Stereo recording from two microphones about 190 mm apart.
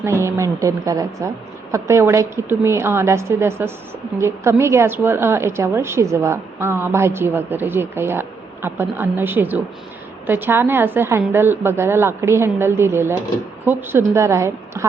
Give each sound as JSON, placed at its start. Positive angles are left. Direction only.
{"t": 0.0, "sound": "a woman's voice", "side_deg": -15}